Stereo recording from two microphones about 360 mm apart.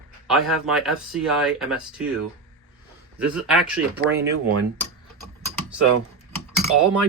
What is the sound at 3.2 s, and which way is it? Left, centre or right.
Speech, centre.